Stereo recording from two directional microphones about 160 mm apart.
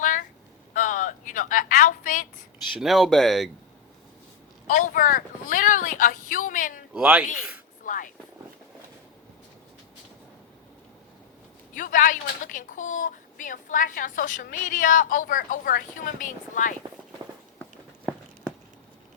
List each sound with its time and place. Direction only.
0.0 s a sound: 55° left (ahead or behind)
2.7 s speech: centre (ahead or behind)
4.7 s speech: 55° left (ahead or behind)
6.9 s speech: 5° right (ahead or behind)
7.9 s speech: 55° left (ahead or behind)
11.7 s a woman's voice: 55° left (ahead or behind)